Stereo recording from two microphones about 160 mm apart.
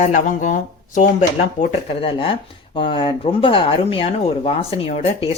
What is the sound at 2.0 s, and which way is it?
Speech, 35° left (ahead or behind).